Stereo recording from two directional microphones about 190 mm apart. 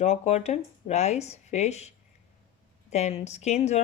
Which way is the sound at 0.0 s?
35° left (ahead or behind).